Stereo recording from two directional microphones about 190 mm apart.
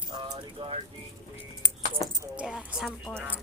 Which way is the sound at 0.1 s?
25° right (ahead or behind).